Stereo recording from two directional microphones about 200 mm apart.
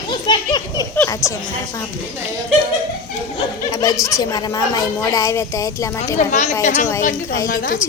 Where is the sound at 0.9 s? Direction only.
10° left (ahead or behind).